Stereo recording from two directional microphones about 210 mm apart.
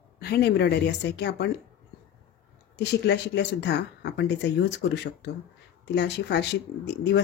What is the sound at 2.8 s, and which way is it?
Speech, 55° left (ahead or behind).